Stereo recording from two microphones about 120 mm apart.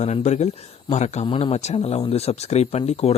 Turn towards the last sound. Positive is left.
turn(degrees=60)  # may be behind; listen again after turning